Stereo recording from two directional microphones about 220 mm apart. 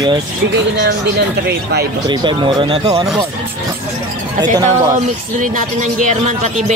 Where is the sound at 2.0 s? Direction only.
20° right (ahead or behind).